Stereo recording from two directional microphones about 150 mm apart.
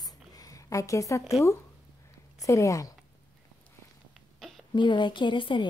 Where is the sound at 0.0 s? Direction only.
25° left (ahead or behind).